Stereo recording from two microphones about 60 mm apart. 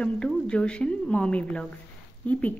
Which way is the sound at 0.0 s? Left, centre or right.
Centre.